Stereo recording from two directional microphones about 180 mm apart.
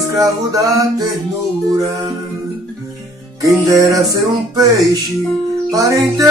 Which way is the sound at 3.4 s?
15° right (ahead or behind).